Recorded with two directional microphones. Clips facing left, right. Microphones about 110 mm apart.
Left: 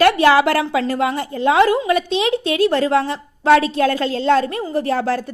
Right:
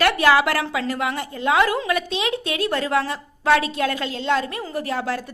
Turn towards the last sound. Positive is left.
turn(degrees=35)  # may be behind; listen again after turning